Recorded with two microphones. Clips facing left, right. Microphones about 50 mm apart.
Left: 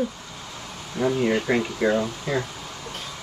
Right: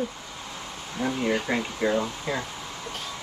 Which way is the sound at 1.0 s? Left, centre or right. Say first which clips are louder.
Left 4 dB; left.